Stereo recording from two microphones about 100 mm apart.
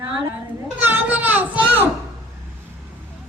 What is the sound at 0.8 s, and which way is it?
Children playing, 20° right (ahead or behind).